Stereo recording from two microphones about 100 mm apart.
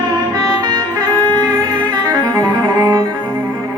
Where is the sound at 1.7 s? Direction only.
45° right (ahead or behind).